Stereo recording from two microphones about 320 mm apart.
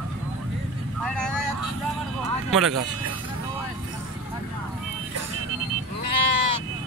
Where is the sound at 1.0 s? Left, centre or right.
Centre.